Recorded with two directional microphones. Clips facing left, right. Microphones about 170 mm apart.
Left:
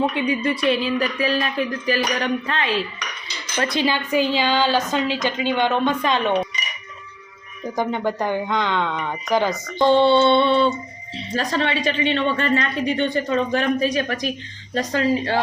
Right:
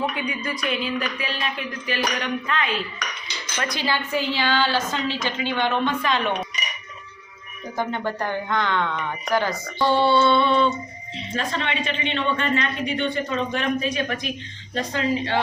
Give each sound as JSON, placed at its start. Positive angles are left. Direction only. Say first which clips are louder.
{"t": 0.0, "sound": "speech", "louder": "left 6 dB", "side_deg": 25}
{"t": 3.6, "sound": "a woman's voice", "louder": "left 5 dB", "side_deg": 20}
{"t": 7.8, "sound": "speech", "louder": "left 3 dB", "side_deg": 15}